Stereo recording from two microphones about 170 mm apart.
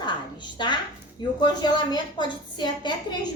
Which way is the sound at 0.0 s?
25° left (ahead or behind).